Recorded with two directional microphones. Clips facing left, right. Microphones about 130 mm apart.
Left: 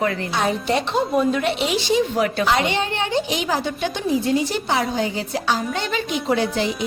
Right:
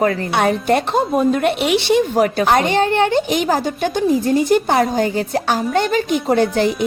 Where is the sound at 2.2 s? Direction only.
45° right (ahead or behind).